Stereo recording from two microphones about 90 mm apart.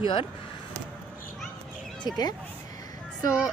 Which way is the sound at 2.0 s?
50° left (ahead or behind).